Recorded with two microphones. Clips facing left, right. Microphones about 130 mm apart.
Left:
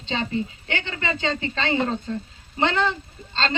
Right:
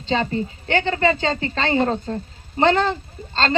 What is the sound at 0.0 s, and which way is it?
A woman's voice, 40° right (ahead or behind).